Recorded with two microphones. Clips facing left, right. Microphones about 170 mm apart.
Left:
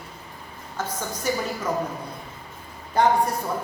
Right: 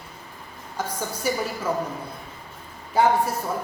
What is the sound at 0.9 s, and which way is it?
Speech, 10° right (ahead or behind).